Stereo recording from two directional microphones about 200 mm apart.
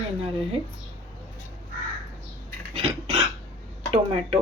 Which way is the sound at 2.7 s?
30° right (ahead or behind).